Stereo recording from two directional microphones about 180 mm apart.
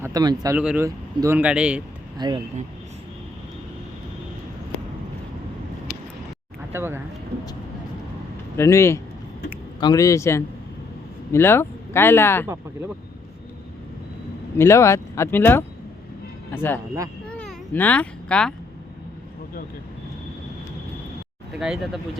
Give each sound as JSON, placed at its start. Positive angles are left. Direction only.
{"t": 0.0, "sound": "speech", "side_deg": -20}
{"t": 0.5, "sound": "speech", "side_deg": -10}
{"t": 2.1, "sound": "speech", "side_deg": -25}
{"t": 6.7, "sound": "speech", "side_deg": -15}
{"t": 8.5, "sound": "speech", "side_deg": 15}
{"t": 14.6, "sound": "speech", "side_deg": 15}
{"t": 17.2, "sound": "cat", "side_deg": 5}
{"t": 21.5, "sound": "speech", "side_deg": -5}